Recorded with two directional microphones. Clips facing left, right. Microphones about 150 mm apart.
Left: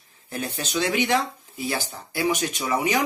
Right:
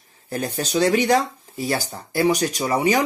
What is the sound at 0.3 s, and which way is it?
Speech, 40° right (ahead or behind).